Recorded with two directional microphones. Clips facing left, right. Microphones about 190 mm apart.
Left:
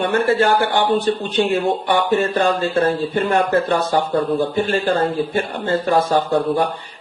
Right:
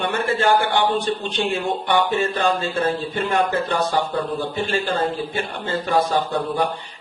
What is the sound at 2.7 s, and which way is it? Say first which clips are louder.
A man's voice: left 5 dB; 60° left (ahead or behind).